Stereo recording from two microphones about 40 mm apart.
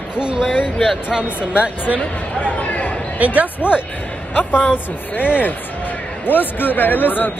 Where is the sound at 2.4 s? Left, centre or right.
Left.